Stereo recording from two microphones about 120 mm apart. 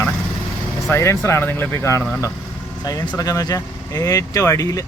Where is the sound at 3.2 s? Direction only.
30° left (ahead or behind).